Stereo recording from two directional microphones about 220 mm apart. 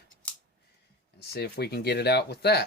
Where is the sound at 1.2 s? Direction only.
45° left (ahead or behind).